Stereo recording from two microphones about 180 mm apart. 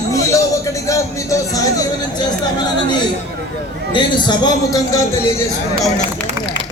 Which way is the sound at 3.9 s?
25° left (ahead or behind).